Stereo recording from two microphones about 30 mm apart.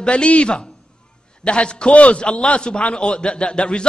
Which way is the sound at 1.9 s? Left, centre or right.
Left.